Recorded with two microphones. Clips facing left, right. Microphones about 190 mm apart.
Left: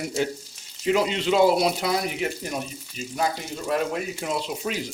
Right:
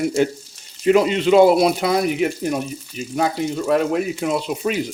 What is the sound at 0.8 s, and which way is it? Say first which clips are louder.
Speech: right 7 dB; 55° right (ahead or behind).